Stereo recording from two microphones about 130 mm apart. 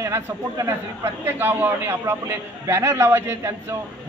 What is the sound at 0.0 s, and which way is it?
A woman's voice, 25° right (ahead or behind).